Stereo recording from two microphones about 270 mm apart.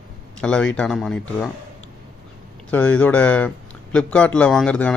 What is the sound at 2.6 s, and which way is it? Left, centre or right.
Speech, centre.